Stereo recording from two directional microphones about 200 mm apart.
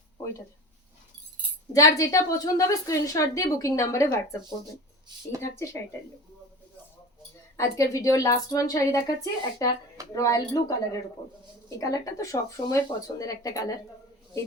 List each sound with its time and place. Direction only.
1.7 s a woman's voice: 15° left (ahead or behind)
7.5 s a woman's voice: 15° left (ahead or behind)